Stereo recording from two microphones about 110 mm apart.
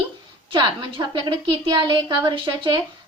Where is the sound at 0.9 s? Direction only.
50° right (ahead or behind).